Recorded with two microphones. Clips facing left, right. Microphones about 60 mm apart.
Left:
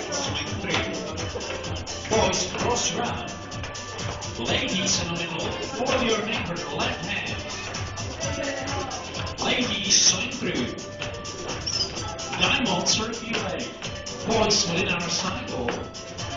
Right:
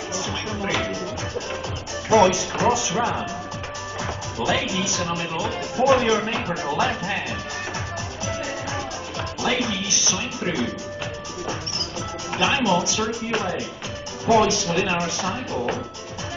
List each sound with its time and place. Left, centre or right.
0.1 s music: centre
2.2 s music: right
4.4 s speech: centre
9.4 s music: centre
12.4 s speech: centre